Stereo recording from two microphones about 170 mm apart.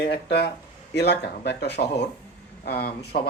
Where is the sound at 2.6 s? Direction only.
70° left (ahead or behind).